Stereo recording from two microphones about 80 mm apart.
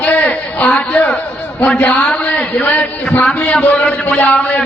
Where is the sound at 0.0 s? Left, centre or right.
Centre.